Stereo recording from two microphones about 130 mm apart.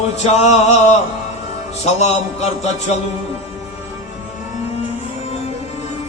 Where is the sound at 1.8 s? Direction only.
60° left (ahead or behind).